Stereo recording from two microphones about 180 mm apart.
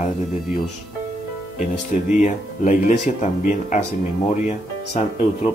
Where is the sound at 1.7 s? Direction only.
40° left (ahead or behind).